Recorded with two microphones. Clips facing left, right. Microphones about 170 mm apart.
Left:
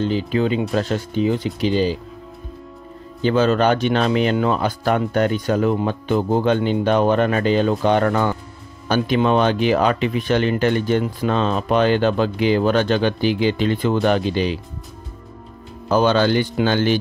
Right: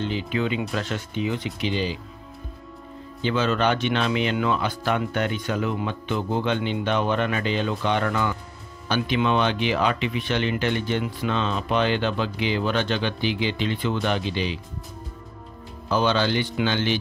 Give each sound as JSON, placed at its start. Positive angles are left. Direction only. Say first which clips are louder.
{"t": 0.0, "sound": "speech", "louder": "left 6 dB", "side_deg": 40}
{"t": 3.2, "sound": "speech", "louder": "left 6 dB", "side_deg": 40}
{"t": 15.9, "sound": "speech", "louder": "left 6 dB", "side_deg": 45}